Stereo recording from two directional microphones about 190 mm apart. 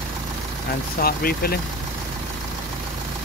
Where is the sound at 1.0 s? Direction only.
50° left (ahead or behind).